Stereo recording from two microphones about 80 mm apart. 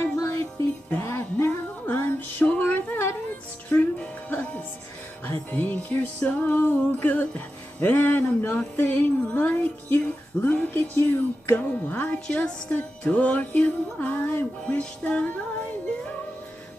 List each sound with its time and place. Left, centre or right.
0.0 s music: left